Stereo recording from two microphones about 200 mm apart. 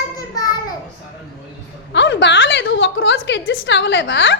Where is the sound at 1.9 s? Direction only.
65° left (ahead or behind).